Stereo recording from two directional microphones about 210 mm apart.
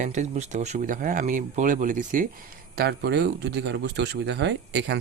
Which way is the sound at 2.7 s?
50° right (ahead or behind).